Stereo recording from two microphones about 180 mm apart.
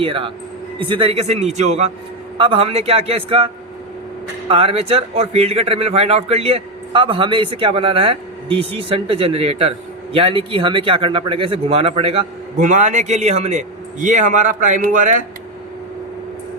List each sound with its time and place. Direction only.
0.0 s speech: 30° right (ahead or behind); by 15.2 s 45° right (ahead or behind)